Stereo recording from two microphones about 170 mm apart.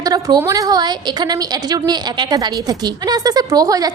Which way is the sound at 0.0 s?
25° right (ahead or behind).